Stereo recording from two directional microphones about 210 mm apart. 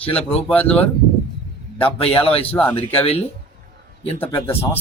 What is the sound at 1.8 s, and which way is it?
Speech, 25° left (ahead or behind).